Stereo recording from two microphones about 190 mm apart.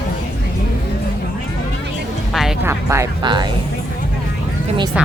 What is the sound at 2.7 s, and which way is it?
Speech, 15° right (ahead or behind).